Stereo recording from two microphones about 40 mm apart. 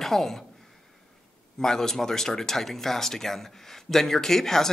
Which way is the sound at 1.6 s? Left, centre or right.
Centre.